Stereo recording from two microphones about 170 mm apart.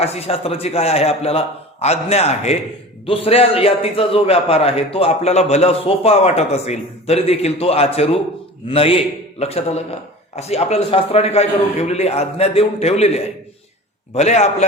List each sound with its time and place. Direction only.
0.0 s a man's voice: 35° left (ahead or behind)